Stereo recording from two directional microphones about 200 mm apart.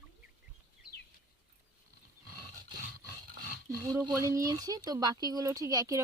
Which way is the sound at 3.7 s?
20° right (ahead or behind).